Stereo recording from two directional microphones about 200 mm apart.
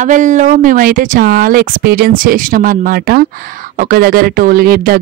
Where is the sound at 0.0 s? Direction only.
40° right (ahead or behind).